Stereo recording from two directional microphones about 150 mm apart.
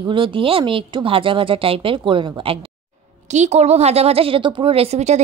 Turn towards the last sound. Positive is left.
turn(degrees=-45)  # may be behind; listen again after turning